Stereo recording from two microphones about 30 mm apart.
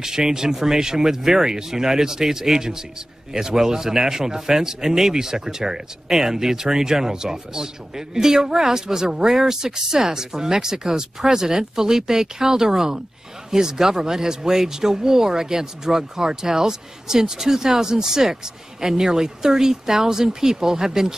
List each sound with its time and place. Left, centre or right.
0.0 s speech: centre